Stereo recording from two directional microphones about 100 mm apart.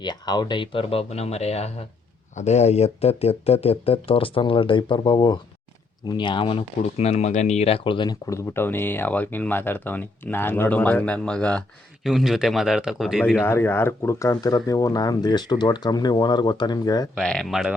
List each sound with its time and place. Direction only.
0.0 s speech: 45° left (ahead or behind)
8.3 s speech: 25° left (ahead or behind); by 11.6 s 10° left (ahead or behind)
12.0 s speech: 5° right (ahead or behind)
13.3 s speech: 25° left (ahead or behind); by 17.1 s 40° left (ahead or behind)
17.2 s speech: 5° left (ahead or behind)